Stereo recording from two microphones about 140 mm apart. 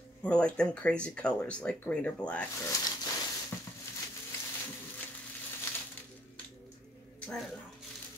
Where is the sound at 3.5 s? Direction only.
20° left (ahead or behind).